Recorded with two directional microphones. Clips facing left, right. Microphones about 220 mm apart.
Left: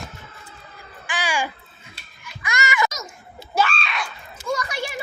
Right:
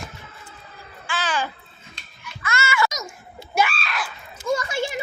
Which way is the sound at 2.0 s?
15° left (ahead or behind).